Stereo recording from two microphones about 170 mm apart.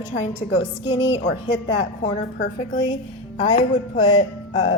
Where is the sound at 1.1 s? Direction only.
40° left (ahead or behind).